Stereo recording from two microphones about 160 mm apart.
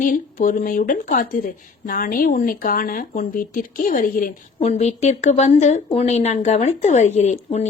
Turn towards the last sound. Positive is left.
turn(degrees=45)  # may be behind; listen again after turning